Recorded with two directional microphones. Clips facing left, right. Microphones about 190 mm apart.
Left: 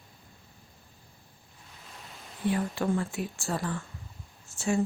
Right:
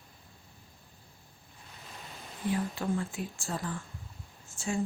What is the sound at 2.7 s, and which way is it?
Speech, 75° left (ahead or behind).